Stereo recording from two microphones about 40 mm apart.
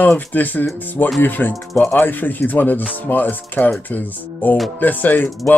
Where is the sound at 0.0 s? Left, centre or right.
Left.